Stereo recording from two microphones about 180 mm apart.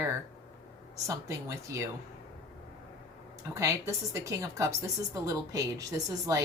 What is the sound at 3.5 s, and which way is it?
A woman's voice, 15° right (ahead or behind).